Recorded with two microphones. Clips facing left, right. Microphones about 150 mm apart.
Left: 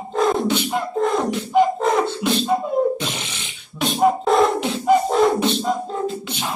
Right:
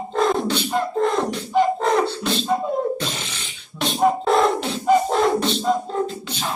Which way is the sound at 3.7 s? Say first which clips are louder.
Left 1 dB; 5° left (ahead or behind).